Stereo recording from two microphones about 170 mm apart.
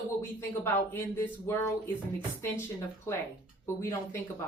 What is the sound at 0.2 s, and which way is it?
Speech, 15° left (ahead or behind).